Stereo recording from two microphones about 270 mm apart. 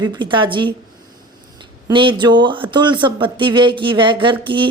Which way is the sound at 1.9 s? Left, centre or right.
Centre.